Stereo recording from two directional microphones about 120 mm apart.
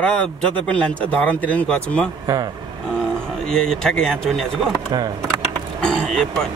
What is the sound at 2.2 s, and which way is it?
Speech, 30° right (ahead or behind).